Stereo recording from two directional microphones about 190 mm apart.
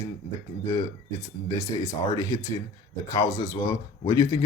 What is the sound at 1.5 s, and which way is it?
Speech, 15° left (ahead or behind).